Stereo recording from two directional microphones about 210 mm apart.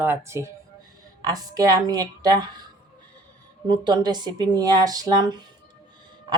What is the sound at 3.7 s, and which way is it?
A woman's voice, 20° right (ahead or behind).